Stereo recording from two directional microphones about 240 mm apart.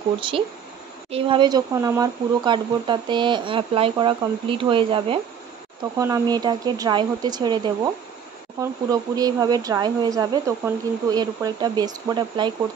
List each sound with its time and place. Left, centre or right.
1.1 s speech: right